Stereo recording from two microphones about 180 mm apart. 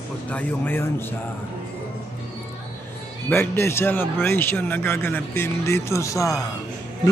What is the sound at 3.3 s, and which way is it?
A man's voice, 10° left (ahead or behind).